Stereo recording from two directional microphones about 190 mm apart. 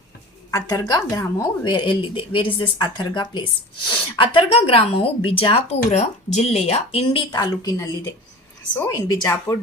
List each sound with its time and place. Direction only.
0.5 s speech: 20° left (ahead or behind)